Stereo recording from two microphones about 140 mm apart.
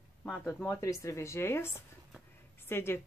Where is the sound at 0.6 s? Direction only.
25° left (ahead or behind).